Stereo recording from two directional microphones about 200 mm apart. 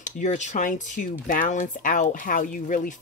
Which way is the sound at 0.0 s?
35° left (ahead or behind).